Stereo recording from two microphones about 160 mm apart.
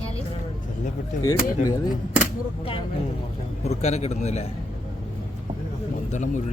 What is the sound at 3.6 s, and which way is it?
Speech, 40° left (ahead or behind).